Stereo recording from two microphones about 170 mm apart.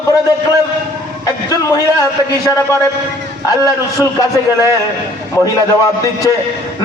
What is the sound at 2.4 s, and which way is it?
Speech, 20° left (ahead or behind).